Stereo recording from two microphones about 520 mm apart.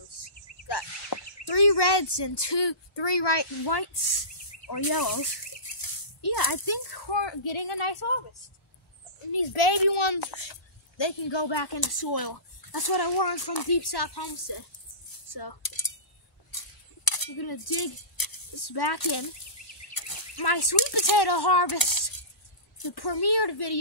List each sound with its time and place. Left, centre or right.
0.7 s speech: left
9.3 s a child's voice: left
15.2 s coin: left
17.0 s a child's voice: left